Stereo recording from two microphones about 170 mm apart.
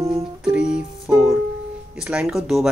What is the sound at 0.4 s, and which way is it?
Music, 5° right (ahead or behind).